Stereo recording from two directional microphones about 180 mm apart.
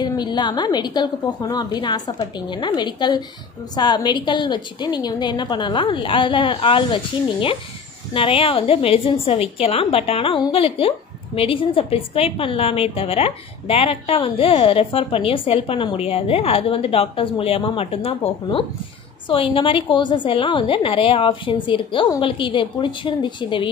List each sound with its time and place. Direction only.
0.0 s a woman's voice: 25° left (ahead or behind)